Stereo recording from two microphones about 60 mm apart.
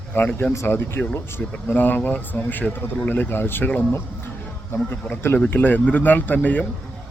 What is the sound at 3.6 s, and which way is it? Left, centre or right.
Speech, left.